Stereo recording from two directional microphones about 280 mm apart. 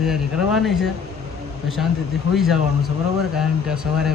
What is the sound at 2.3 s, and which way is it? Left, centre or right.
Speech, centre.